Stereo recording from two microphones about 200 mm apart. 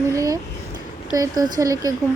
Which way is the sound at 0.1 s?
15° right (ahead or behind).